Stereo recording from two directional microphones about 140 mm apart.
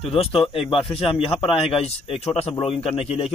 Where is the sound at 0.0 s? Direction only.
40° left (ahead or behind).